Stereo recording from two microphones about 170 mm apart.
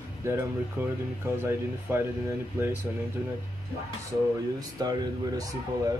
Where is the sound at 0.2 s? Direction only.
15° right (ahead or behind).